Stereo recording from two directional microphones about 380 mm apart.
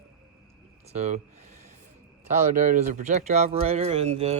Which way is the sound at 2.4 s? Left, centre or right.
Centre.